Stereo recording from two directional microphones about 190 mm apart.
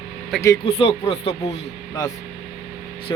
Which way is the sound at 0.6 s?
30° left (ahead or behind).